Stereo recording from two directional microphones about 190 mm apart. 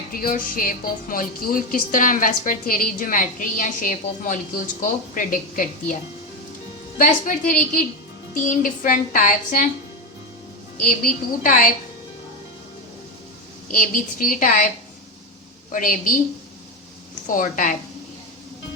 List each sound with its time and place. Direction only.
0.1 s speech: 50° left (ahead or behind)
7.0 s speech: 45° left (ahead or behind)
11.0 s speech: 45° left (ahead or behind)
13.7 s speech: 45° left (ahead or behind)
15.7 s speech: 45° left (ahead or behind)
17.2 s speech: 45° left (ahead or behind)